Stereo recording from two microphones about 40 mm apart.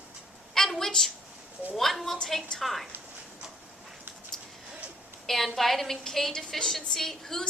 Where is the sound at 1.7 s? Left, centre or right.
Centre.